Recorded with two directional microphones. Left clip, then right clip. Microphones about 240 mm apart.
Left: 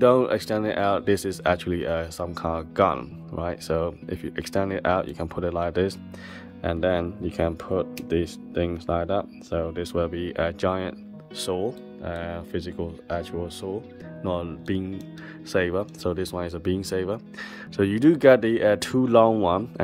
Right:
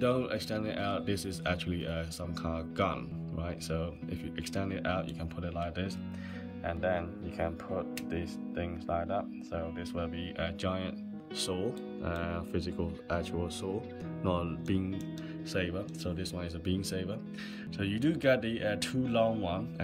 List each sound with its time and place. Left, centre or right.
0.0 s speech: centre